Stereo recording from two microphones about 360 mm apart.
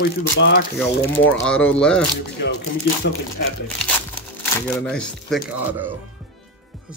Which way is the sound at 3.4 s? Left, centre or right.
Left.